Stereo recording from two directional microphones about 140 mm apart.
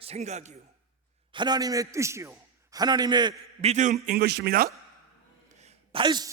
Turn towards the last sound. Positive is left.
turn(degrees=-30)  # may be behind; listen again after turning